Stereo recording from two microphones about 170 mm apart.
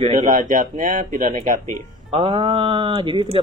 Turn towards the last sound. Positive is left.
turn(degrees=-30)  # may be behind; listen again after turning